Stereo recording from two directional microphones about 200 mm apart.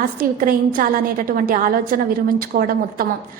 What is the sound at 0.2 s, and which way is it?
A woman's voice, 45° right (ahead or behind).